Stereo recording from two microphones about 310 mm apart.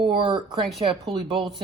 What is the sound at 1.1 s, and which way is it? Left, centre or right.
Speech, centre.